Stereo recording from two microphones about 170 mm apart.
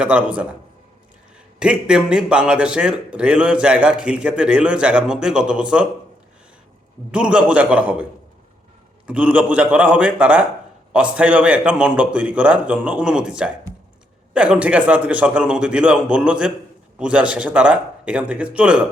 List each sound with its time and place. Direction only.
0.0 s a man's voice: 5° right (ahead or behind)
1.5 s a man's voice: 5° right (ahead or behind)
7.1 s a man's voice: 5° right (ahead or behind)
9.0 s a man's voice: 10° right (ahead or behind)